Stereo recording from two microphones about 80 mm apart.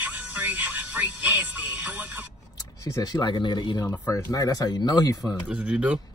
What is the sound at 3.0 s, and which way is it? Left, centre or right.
Speech, left.